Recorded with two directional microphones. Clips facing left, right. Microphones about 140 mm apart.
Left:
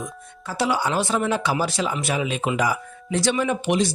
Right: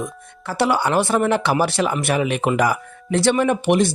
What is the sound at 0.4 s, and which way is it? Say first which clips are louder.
Speech: right 4 dB; 65° right (ahead or behind).